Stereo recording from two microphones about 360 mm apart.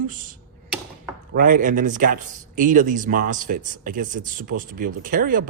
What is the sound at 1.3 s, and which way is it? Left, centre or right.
A man's voice, right.